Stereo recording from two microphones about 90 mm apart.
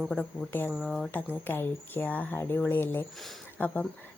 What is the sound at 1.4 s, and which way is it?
A woman's voice, 25° left (ahead or behind).